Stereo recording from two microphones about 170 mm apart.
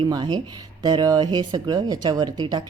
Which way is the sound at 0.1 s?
25° right (ahead or behind).